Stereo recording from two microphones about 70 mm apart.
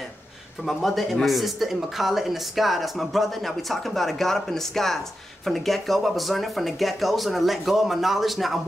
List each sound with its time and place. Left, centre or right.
0.7 s speech: centre